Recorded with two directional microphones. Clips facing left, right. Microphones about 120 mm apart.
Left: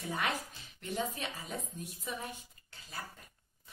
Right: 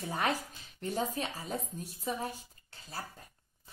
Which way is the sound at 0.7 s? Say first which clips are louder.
Right 3 dB; 35° right (ahead or behind).